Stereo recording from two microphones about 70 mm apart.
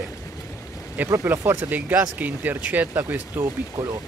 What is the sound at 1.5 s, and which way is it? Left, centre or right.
Speech, right.